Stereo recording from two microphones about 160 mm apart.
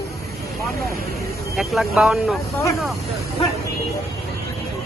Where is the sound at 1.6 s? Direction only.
Centre (ahead or behind).